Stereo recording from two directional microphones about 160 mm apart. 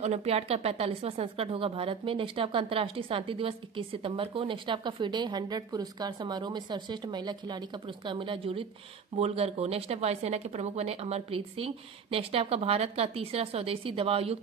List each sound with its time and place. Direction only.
0.0 s speech: 40° right (ahead or behind)